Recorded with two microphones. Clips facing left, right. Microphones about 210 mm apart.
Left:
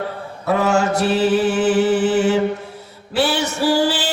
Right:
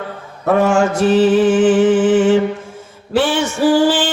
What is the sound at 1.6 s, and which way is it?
Music, 40° left (ahead or behind).